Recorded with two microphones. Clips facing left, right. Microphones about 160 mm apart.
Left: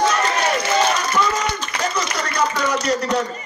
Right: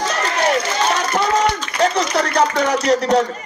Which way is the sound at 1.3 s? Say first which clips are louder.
Right 6 dB; 70° right (ahead or behind).